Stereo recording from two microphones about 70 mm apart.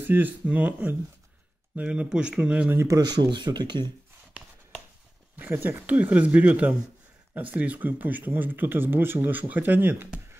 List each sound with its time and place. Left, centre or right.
0.0 s a man's voice: right
3.0 s speech: right
5.4 s speech: right